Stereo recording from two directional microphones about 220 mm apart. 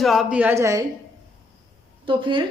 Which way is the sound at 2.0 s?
25° right (ahead or behind).